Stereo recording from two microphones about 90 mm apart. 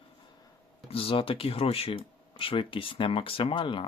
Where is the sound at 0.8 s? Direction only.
90° left.